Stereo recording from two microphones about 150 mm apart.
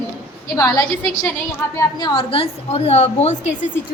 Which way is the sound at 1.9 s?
30° left (ahead or behind).